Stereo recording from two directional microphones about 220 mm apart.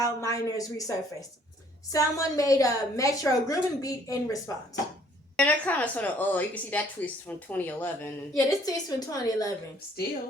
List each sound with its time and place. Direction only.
0.0 s a woman's voice: 15° left (ahead or behind)